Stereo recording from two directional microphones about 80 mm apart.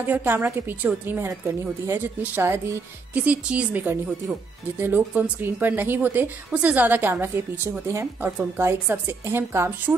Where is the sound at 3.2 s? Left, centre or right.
Centre.